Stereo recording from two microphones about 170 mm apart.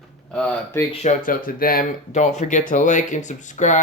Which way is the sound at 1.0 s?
55° left (ahead or behind).